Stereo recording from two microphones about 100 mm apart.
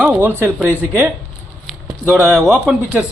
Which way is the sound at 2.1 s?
15° right (ahead or behind).